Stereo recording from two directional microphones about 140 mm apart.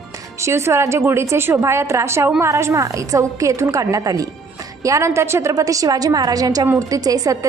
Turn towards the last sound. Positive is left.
turn(degrees=-25)  # may be behind; listen again after turning